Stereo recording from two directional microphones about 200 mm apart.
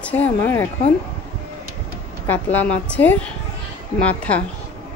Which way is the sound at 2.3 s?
10° left (ahead or behind).